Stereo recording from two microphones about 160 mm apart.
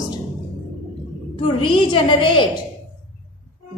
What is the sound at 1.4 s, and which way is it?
A woman's voice, 30° left (ahead or behind).